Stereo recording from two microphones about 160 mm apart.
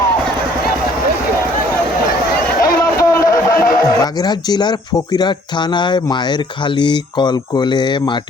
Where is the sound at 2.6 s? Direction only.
20° left (ahead or behind).